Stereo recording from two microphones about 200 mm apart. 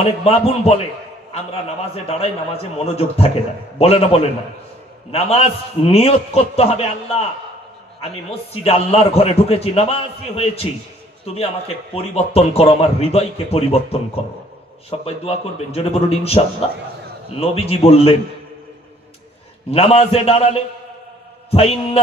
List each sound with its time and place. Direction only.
0.0 s a man's voice: 30° left (ahead or behind)
2.0 s a man's voice: 30° left (ahead or behind)
11.9 s a man's voice: 30° left (ahead or behind)
14.9 s a man's voice: 30° left (ahead or behind)
17.4 s a man's voice: 30° left (ahead or behind)
19.7 s a man's voice: 30° left (ahead or behind)